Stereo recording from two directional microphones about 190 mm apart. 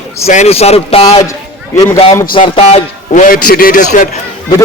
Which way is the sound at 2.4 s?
35° left (ahead or behind).